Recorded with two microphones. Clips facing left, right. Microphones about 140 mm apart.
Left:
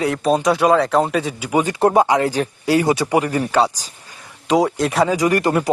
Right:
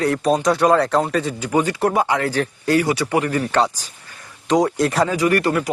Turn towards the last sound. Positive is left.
turn(degrees=20)  # may be behind; listen again after turning